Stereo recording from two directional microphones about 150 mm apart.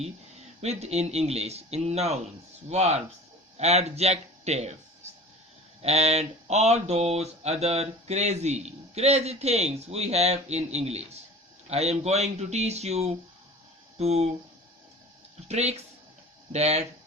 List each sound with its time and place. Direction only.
0.6 s speech: 45° right (ahead or behind)
5.8 s speech: 45° right (ahead or behind)
15.4 s speech: 45° right (ahead or behind)